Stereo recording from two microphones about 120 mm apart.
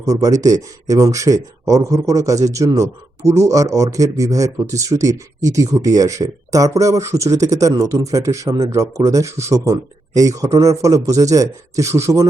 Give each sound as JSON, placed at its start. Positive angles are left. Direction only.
{"t": 0.0, "sound": "speech", "side_deg": -30}